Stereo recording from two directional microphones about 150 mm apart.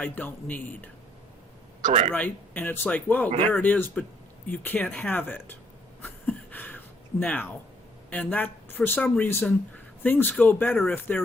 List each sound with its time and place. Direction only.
0.0 s speech: 10° left (ahead or behind)
1.8 s speech: 50° right (ahead or behind)
2.1 s speech: 10° left (ahead or behind)
6.0 s a sound: 10° left (ahead or behind)
8.1 s speech: 10° left (ahead or behind)